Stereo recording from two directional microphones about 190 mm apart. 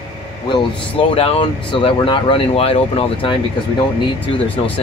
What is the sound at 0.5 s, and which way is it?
Speech, 30° left (ahead or behind).